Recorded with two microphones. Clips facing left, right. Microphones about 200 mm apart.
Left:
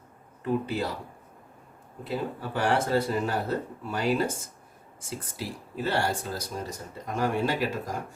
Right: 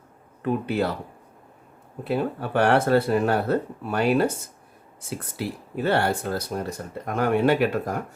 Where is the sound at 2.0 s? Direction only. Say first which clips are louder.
Right 6 dB; 65° right (ahead or behind).